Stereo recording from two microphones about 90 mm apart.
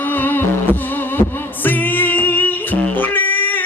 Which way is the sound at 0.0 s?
20° left (ahead or behind).